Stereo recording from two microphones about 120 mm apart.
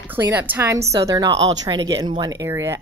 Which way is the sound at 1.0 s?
30° right (ahead or behind).